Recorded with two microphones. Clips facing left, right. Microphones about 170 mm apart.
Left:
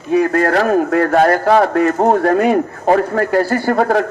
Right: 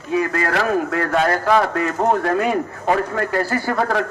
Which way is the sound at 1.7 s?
55° left (ahead or behind).